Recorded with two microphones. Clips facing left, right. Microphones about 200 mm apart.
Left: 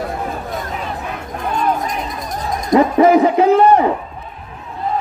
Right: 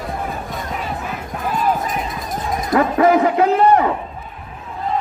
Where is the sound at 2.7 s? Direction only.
20° left (ahead or behind).